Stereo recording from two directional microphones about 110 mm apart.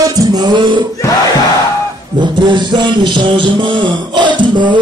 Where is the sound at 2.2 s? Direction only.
45° right (ahead or behind).